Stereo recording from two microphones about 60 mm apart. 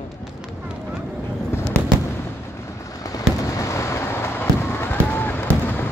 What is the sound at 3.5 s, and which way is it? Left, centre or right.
Fireworks, left.